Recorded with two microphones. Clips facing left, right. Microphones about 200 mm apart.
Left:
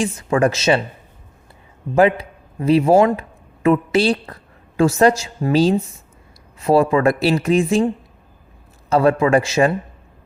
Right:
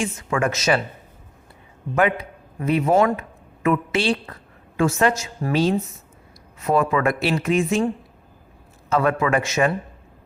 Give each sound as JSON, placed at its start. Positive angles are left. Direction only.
{"t": 0.0, "sound": "speech", "side_deg": 35}
{"t": 2.0, "sound": "speech", "side_deg": 30}
{"t": 8.9, "sound": "speech", "side_deg": 35}